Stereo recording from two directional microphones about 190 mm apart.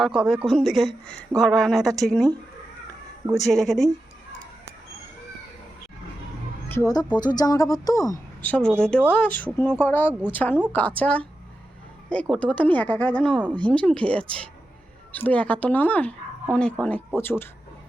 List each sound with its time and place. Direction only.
0.2 s speech: centre (ahead or behind)
3.3 s speech: centre (ahead or behind)
6.7 s a woman's voice: 15° left (ahead or behind)
10.1 s a woman's voice: 5° right (ahead or behind)
10.3 s a woman's voice: 10° left (ahead or behind)